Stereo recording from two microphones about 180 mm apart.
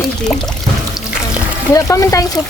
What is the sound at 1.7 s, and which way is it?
Speech, 15° left (ahead or behind).